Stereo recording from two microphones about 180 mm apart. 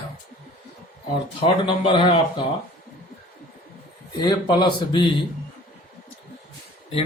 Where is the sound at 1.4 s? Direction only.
30° left (ahead or behind).